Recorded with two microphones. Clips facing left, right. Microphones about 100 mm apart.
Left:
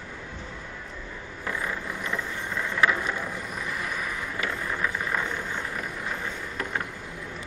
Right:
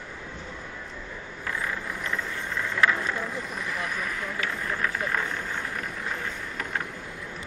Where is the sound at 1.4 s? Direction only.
20° left (ahead or behind).